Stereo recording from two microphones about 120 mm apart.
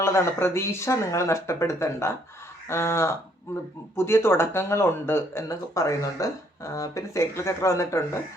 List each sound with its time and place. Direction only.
0.0 s speech: 20° left (ahead or behind)